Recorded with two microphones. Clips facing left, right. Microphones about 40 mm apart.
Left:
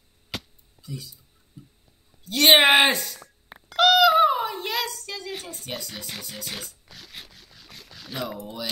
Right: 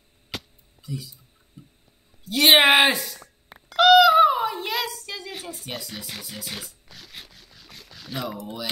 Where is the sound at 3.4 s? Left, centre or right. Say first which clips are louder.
Right 3 dB; centre.